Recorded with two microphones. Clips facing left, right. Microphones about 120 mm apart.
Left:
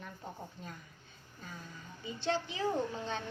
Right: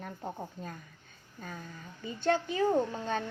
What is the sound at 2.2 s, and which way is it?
Speech, 50° right (ahead or behind).